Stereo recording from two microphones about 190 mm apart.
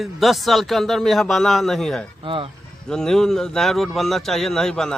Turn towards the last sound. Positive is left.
turn(degrees=0)  # may be behind; listen again after turning